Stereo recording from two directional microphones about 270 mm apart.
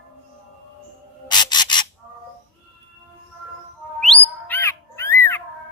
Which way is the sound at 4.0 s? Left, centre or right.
Centre.